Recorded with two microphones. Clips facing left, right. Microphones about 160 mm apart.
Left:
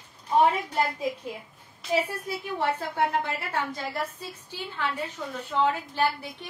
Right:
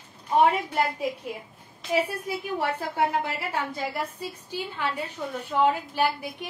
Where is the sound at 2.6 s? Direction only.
10° right (ahead or behind).